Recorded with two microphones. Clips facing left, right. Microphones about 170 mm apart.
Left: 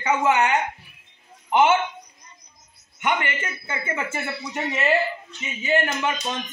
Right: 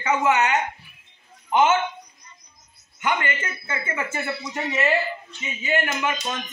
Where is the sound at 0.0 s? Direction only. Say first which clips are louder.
Even; 15° left (ahead or behind).